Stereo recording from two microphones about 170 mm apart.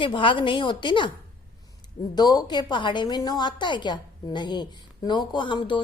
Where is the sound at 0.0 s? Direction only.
30° left (ahead or behind).